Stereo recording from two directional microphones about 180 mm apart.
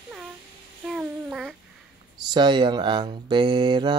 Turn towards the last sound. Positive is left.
turn(degrees=-25)  # may be behind; listen again after turning